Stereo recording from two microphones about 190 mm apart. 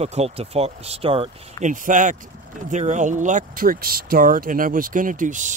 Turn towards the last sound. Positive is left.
turn(degrees=-40)  # may be behind; listen again after turning